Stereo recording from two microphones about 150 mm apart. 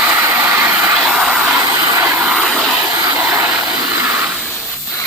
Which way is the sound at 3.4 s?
15° right (ahead or behind).